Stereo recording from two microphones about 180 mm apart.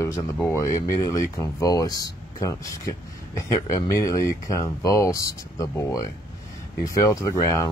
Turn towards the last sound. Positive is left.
turn(degrees=20)  # may be behind; listen again after turning